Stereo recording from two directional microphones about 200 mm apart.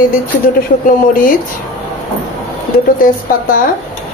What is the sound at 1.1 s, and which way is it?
Speech, 45° left (ahead or behind).